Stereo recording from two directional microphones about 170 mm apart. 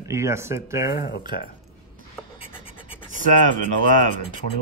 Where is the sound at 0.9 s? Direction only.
60° left (ahead or behind).